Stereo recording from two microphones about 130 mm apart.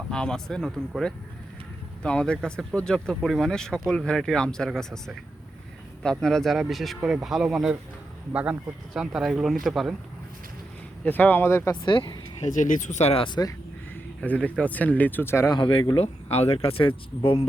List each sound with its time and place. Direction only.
0.1 s speech: 5° left (ahead or behind)
11.0 s speech: 15° left (ahead or behind)
11.9 s speech: 40° left (ahead or behind)
12.4 s speech: 80° left; by 13.2 s 55° left (ahead or behind)
13.2 s speech: 35° left (ahead or behind)
14.2 s speech: 10° left (ahead or behind)
15.5 s speech: 40° left (ahead or behind)